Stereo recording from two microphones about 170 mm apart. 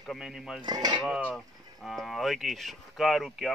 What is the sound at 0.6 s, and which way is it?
Cutlery, 25° right (ahead or behind).